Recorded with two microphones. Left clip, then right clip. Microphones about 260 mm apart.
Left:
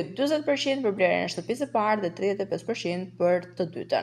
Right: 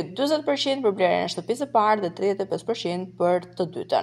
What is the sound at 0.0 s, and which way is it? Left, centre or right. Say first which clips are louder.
A woman's voice: right 2 dB; right.